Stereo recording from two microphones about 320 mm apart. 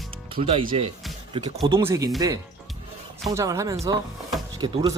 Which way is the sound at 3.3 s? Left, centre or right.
Centre.